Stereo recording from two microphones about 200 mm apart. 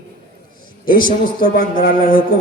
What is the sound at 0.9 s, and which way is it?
Speech, 45° left (ahead or behind).